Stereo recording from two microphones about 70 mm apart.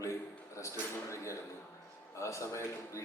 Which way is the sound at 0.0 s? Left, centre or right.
Left.